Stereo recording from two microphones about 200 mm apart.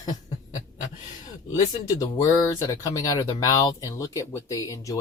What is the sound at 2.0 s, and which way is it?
Speech, 20° left (ahead or behind).